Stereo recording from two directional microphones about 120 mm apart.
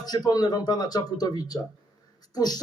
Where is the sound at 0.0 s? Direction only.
35° left (ahead or behind).